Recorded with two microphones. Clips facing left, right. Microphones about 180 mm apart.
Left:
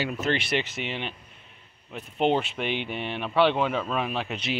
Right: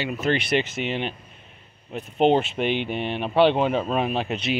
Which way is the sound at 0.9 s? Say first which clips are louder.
Right 6 dB; 45° right (ahead or behind).